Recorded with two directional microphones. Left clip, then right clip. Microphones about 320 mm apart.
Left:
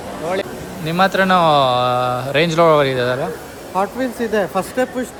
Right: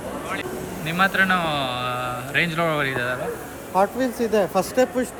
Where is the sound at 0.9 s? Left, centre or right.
Centre.